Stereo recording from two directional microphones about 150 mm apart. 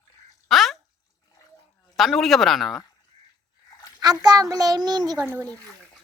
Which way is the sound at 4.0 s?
25° right (ahead or behind).